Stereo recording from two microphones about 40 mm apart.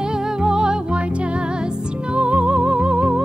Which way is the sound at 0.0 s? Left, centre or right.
Centre.